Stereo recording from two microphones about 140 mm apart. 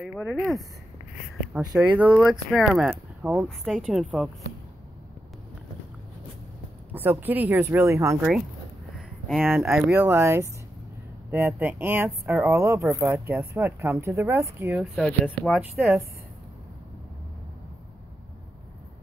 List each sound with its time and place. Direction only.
0.0 s speech: 5° right (ahead or behind)
1.8 s a woman's voice: 10° right (ahead or behind)
2.9 s speech: 10° right (ahead or behind)
3.3 s a woman's voice: centre (ahead or behind)
6.9 s speech: 15° right (ahead or behind)
9.4 s speech: 15° right (ahead or behind)
14.8 s a woman's voice: centre (ahead or behind)
15.2 s speech: 10° left (ahead or behind)